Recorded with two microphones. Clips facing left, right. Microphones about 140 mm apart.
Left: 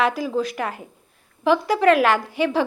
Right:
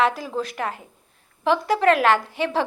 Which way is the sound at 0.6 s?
30° right (ahead or behind).